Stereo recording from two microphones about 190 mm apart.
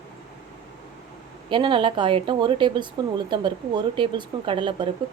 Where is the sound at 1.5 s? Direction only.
25° right (ahead or behind).